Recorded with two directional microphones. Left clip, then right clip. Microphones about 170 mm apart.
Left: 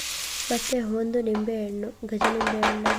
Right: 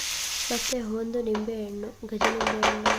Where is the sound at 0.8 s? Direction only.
20° left (ahead or behind).